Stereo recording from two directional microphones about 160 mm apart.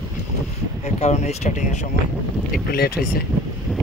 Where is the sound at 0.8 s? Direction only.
45° left (ahead or behind).